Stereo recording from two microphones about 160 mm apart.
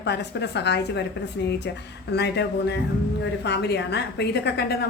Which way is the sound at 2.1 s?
90° left.